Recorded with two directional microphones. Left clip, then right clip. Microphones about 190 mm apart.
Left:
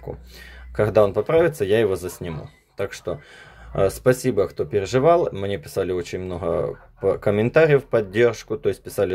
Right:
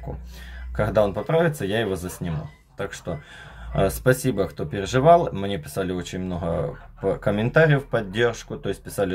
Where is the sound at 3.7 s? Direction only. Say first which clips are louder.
Left 2 dB; 30° left (ahead or behind).